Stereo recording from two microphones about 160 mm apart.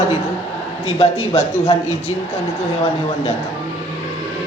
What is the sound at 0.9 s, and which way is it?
Speech, 40° left (ahead or behind).